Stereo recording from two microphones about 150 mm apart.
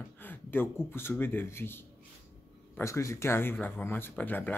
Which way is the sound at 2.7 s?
20° left (ahead or behind).